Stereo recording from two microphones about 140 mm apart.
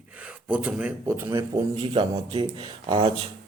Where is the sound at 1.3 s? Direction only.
40° right (ahead or behind).